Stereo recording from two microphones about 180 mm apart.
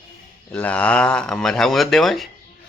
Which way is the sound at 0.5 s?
5° left (ahead or behind).